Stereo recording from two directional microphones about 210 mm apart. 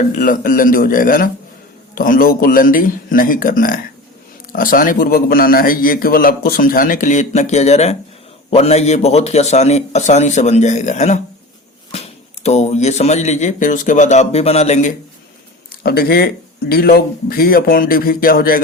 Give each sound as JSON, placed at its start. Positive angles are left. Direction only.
{"t": 0.2, "sound": "a man's voice", "side_deg": 40}
{"t": 15.7, "sound": "a man's voice", "side_deg": 50}